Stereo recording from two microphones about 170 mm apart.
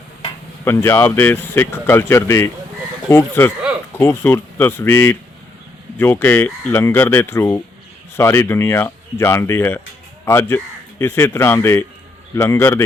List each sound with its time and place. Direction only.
0.6 s speech: 15° left (ahead or behind)